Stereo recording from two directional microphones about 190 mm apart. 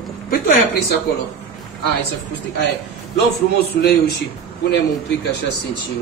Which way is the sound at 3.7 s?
60° left (ahead or behind).